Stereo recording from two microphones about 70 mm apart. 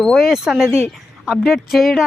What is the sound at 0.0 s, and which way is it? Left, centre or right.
A woman's voice, centre.